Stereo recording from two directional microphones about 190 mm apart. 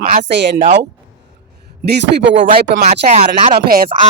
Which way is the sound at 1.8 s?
65° right (ahead or behind).